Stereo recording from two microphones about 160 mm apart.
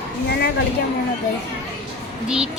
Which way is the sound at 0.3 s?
85° left.